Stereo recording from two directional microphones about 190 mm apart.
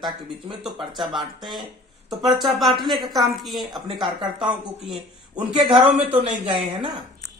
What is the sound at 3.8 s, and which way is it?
Speech, 25° right (ahead or behind).